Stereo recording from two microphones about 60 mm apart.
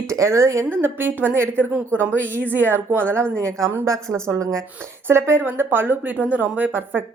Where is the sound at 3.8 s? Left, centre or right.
Right.